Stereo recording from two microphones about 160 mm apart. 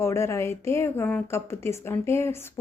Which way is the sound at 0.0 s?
15° left (ahead or behind).